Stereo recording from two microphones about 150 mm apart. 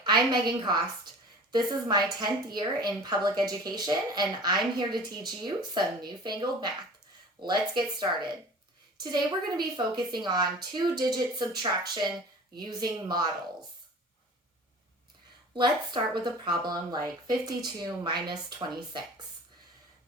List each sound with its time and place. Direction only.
0.0 s a woman's voice: 30° right (ahead or behind)
15.5 s speech: 30° right (ahead or behind)